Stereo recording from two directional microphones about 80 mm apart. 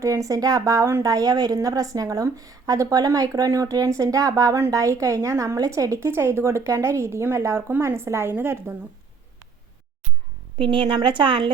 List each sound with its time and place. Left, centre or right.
0.0 s a woman's voice: right
10.6 s speech: right